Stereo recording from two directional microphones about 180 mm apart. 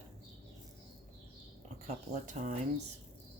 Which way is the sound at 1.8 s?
40° right (ahead or behind).